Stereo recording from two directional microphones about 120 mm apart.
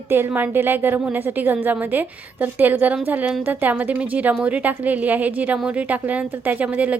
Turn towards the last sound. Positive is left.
turn(degrees=-10)  # may be behind; listen again after turning